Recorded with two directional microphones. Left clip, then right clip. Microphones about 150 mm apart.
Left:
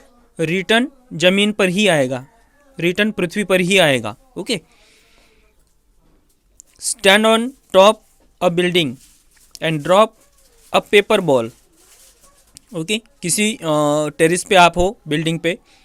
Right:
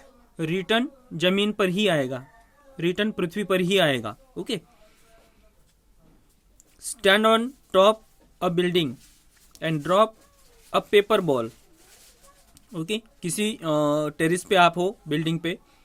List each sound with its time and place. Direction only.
0.3 s speech: 30° left (ahead or behind)
6.7 s speech: 35° left (ahead or behind)
12.5 s speech: 35° left (ahead or behind)